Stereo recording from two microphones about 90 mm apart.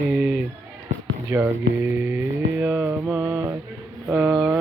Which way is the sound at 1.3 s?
25° right (ahead or behind).